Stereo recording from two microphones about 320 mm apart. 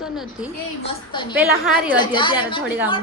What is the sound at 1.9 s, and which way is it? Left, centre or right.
Speech, centre.